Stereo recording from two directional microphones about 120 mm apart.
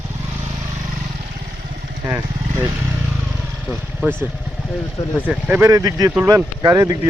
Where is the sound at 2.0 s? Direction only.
20° right (ahead or behind).